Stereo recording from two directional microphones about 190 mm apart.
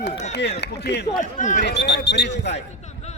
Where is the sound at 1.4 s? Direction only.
40° left (ahead or behind).